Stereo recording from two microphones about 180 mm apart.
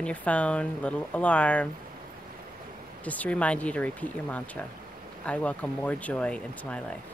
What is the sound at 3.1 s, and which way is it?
Speech, 10° left (ahead or behind).